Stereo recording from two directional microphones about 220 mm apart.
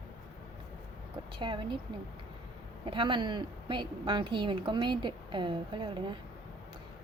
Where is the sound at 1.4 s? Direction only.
20° right (ahead or behind).